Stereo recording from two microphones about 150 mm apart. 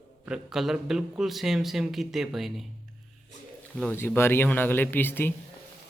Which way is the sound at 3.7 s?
10° left (ahead or behind).